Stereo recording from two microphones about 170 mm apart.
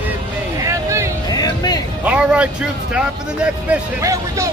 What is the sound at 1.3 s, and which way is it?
Music, 25° left (ahead or behind).